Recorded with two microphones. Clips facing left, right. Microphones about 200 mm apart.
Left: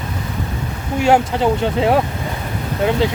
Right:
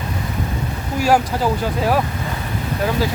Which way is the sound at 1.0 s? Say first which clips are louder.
Left 2 dB; 25° left (ahead or behind).